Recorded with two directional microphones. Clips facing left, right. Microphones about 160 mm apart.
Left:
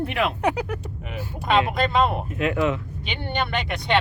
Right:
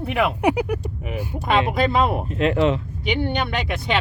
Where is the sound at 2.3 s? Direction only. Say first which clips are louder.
Right 6 dB; 30° right (ahead or behind).